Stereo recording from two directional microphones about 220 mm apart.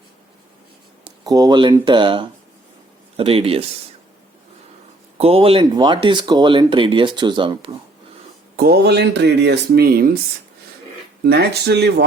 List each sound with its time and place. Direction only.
1.0 s speech: 15° right (ahead or behind)
5.1 s speech: 25° right (ahead or behind)
8.5 s speech: 45° right (ahead or behind)
11.2 s speech: 50° right (ahead or behind)